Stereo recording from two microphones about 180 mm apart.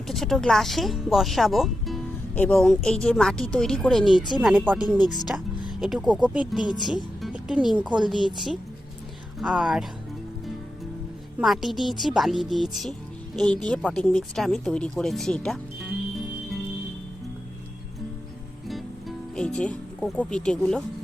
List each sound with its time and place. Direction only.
0.1 s speech: centre (ahead or behind)
6.1 s speech: 25° right (ahead or behind)
6.3 s speech: 5° right (ahead or behind)
11.3 s speech: centre (ahead or behind)
18.7 s music: centre (ahead or behind)